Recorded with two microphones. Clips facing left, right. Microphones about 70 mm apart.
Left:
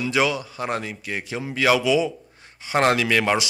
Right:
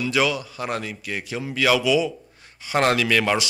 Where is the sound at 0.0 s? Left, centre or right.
Left.